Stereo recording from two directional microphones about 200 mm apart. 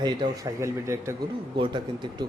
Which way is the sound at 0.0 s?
15° right (ahead or behind).